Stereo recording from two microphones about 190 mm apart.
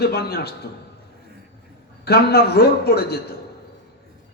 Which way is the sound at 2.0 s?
55° left (ahead or behind).